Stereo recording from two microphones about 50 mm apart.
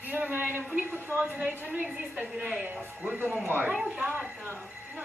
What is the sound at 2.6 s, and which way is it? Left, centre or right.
Speech, right.